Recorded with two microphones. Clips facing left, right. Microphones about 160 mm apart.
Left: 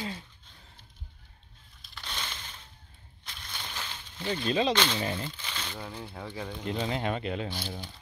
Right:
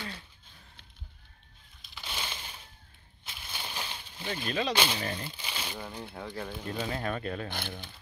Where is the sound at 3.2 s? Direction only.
5° right (ahead or behind).